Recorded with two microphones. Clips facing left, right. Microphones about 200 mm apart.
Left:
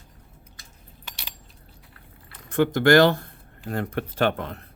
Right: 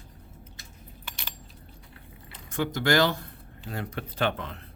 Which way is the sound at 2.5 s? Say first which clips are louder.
Left 8 dB; 55° left (ahead or behind).